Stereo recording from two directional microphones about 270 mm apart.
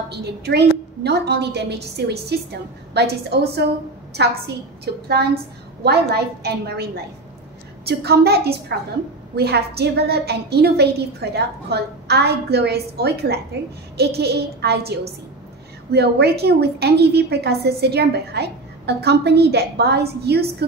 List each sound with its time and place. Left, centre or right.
0.1 s a woman's voice: right
5.0 s a woman's voice: right